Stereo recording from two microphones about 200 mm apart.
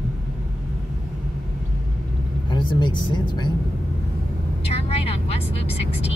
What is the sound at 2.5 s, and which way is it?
Vehicle, 25° left (ahead or behind).